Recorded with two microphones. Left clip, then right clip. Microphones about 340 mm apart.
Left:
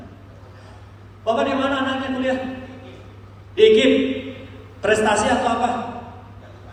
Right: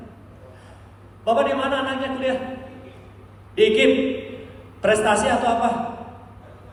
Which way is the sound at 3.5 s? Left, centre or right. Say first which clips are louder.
Left 3 dB; right.